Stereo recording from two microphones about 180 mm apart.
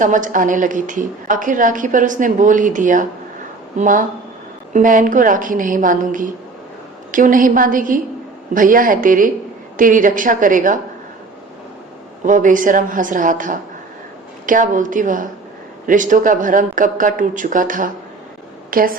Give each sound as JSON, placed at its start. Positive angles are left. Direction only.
{"t": 0.0, "sound": "a woman's voice", "side_deg": -45}
{"t": 12.2, "sound": "a woman's voice", "side_deg": -45}